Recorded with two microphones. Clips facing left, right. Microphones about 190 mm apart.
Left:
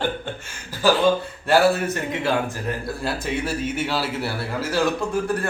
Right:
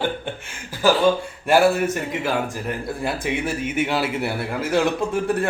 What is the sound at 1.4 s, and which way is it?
Speech, 10° right (ahead or behind).